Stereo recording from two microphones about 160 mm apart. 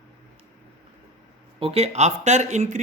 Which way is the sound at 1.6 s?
40° right (ahead or behind).